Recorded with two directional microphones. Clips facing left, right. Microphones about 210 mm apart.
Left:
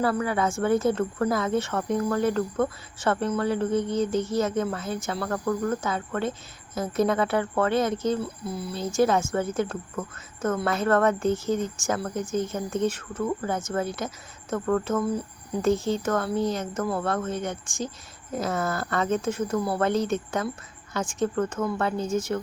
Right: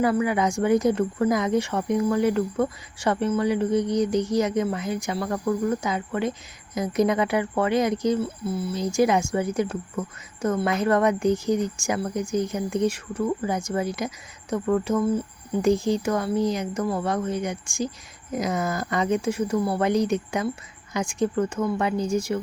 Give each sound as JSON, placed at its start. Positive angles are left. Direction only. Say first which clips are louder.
{"t": 0.0, "sound": "speech", "louder": "right 3 dB", "side_deg": -15}
{"t": 8.7, "sound": "speech", "louder": "right 1 dB", "side_deg": -15}